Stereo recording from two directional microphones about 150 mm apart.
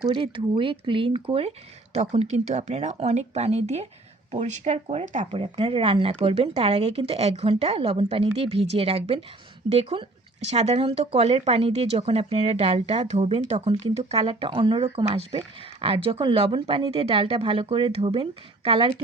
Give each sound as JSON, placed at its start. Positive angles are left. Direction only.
{"t": 0.1, "sound": "speech", "side_deg": -35}